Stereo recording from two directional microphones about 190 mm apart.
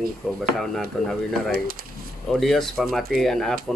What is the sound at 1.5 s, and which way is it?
Speech, 50° right (ahead or behind).